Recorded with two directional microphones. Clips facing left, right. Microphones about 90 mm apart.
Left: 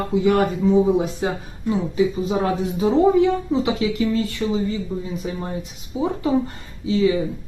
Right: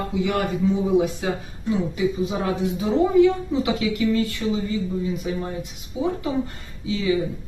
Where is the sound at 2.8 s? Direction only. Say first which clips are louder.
Left 1 dB; 30° left (ahead or behind).